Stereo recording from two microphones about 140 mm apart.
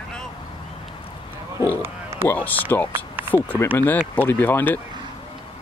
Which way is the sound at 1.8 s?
15° right (ahead or behind).